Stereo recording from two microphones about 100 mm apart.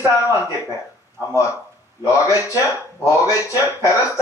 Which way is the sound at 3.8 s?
30° left (ahead or behind).